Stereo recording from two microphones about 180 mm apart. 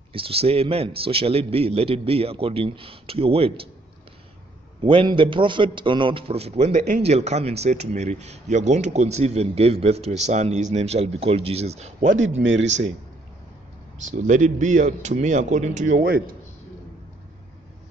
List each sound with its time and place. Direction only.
0.1 s a man's voice: 30° right (ahead or behind)
4.8 s a man's voice: 25° right (ahead or behind)
12.4 s speech: 90° right
14.1 s a man's voice: 45° right (ahead or behind)